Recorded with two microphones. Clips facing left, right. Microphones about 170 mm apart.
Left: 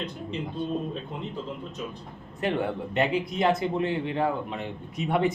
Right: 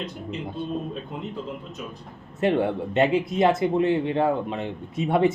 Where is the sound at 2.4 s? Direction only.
25° right (ahead or behind).